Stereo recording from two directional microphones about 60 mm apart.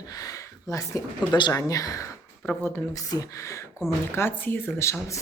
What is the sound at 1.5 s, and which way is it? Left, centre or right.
Speech, left.